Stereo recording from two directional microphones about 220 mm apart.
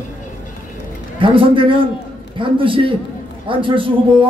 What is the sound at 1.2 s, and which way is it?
A man's voice, 25° right (ahead or behind).